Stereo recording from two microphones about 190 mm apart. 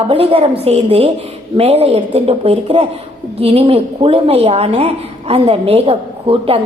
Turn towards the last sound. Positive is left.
turn(degrees=-30)  # may be behind; listen again after turning